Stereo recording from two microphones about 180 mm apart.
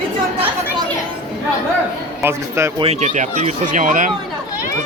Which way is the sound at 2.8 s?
35° right (ahead or behind).